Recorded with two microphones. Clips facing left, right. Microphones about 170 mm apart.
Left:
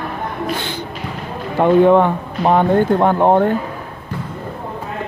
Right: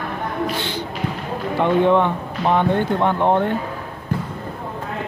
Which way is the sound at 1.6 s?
45° left (ahead or behind).